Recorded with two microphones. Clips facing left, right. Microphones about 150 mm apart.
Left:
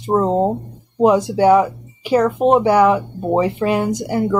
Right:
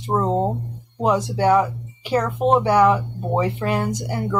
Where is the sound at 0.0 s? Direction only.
20° left (ahead or behind).